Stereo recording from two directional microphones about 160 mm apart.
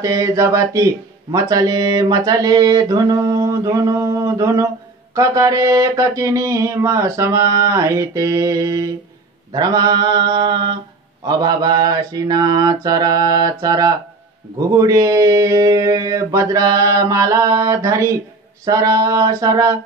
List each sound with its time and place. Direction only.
0.0 s speech: 20° right (ahead or behind)